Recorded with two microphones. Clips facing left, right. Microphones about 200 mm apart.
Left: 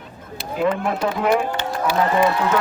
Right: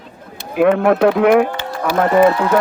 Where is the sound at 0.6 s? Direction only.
65° right (ahead or behind).